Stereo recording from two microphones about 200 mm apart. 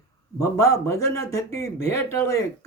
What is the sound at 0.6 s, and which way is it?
Speech, 15° left (ahead or behind).